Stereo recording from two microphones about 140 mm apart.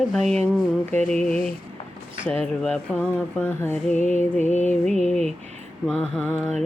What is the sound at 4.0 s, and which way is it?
Music, 60° left (ahead or behind).